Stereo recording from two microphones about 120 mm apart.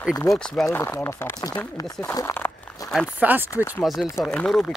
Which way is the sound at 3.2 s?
15° right (ahead or behind).